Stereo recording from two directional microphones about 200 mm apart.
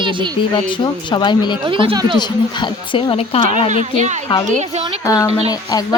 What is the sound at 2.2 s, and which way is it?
Speech, 20° left (ahead or behind).